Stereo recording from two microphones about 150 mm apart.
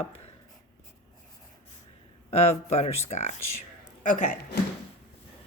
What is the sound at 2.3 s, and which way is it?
A woman's voice, 45° left (ahead or behind).